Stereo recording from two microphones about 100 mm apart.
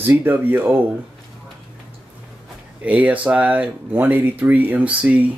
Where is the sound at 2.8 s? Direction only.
15° right (ahead or behind).